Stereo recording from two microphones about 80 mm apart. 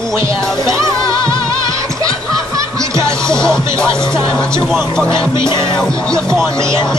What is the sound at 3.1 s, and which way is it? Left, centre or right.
Music, centre.